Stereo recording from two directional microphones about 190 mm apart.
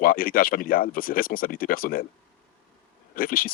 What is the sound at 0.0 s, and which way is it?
Speech, 50° left (ahead or behind).